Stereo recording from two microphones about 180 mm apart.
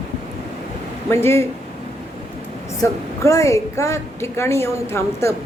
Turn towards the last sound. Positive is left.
turn(degrees=15)  # may be behind; listen again after turning